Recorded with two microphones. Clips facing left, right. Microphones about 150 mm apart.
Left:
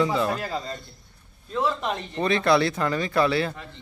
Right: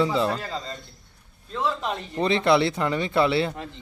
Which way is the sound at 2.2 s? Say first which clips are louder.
Right 1 dB; 20° right (ahead or behind).